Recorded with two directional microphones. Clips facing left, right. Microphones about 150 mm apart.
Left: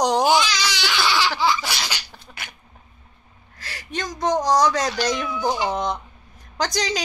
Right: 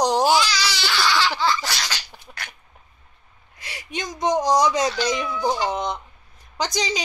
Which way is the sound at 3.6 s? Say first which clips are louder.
Left 1 dB; 10° right (ahead or behind).